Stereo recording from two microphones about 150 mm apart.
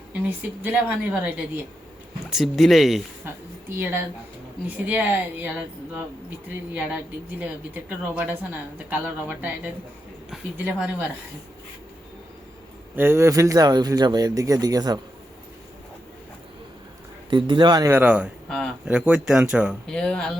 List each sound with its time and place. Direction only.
0.1 s speech: 10° right (ahead or behind)
3.2 s a woman's voice: 15° right (ahead or behind)
13.0 s speech: 15° right (ahead or behind)
17.2 s speech: 30° right (ahead or behind); by 18.3 s 10° right (ahead or behind)
18.4 s speech: 5° left (ahead or behind)
18.9 s speech: 5° right (ahead or behind)
19.9 s speech: 5° left (ahead or behind)